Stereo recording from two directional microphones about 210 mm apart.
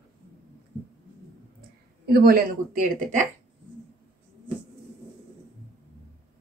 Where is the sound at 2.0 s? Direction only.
45° right (ahead or behind).